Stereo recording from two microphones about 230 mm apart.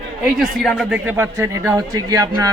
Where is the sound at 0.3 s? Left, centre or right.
Centre.